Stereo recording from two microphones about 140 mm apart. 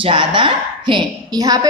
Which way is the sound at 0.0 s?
35° right (ahead or behind).